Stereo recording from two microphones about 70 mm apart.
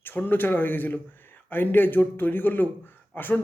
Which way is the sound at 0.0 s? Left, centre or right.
Left.